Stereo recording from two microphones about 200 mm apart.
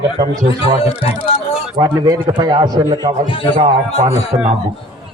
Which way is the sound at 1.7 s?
20° right (ahead or behind).